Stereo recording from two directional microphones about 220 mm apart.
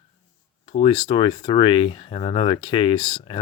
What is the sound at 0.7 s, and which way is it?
Speech, 20° left (ahead or behind).